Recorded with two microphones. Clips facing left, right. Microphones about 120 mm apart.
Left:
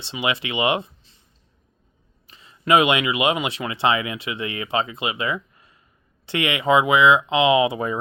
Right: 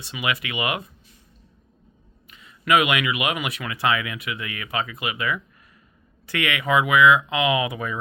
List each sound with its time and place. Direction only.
0.0 s speech: 25° left (ahead or behind)
2.2 s speech: 30° left (ahead or behind)